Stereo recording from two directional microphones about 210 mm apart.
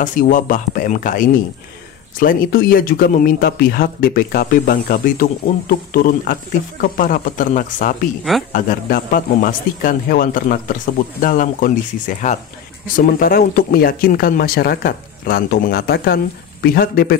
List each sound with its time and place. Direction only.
0.0 s a man's voice: 40° left (ahead or behind)
12.8 s speech: 40° left (ahead or behind)